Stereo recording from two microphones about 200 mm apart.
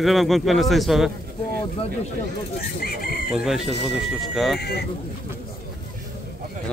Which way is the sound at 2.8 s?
50° left (ahead or behind).